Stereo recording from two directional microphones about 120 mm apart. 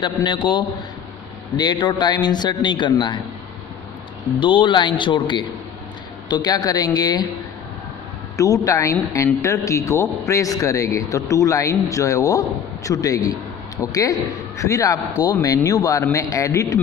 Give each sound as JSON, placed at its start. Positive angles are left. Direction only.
{"t": 0.0, "sound": "a man's voice", "side_deg": 40}
{"t": 4.4, "sound": "a man's voice", "side_deg": 45}
{"t": 8.4, "sound": "a man's voice", "side_deg": 30}